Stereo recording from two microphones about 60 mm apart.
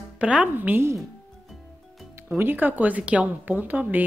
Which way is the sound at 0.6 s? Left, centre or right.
Right.